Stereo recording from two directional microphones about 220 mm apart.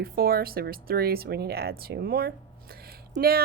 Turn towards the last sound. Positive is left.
turn(degrees=-45)  # may be behind; listen again after turning